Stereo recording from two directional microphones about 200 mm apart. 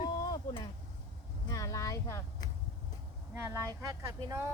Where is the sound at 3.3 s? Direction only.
10° right (ahead or behind).